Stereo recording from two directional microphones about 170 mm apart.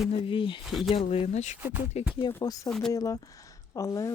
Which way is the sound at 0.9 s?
35° left (ahead or behind).